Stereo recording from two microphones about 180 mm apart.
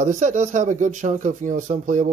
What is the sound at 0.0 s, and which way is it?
Speech, 40° right (ahead or behind).